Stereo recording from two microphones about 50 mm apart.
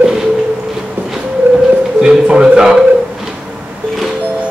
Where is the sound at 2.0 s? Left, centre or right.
Centre.